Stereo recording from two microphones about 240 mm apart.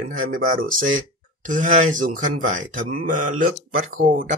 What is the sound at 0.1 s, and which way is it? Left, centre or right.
Speech, right.